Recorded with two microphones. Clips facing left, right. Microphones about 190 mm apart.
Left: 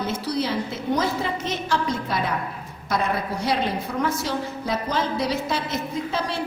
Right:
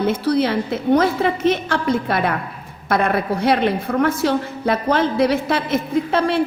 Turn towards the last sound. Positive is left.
turn(degrees=-55)  # may be behind; listen again after turning